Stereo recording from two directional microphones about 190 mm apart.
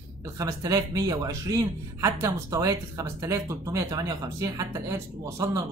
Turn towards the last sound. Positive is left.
turn(degrees=-15)  # may be behind; listen again after turning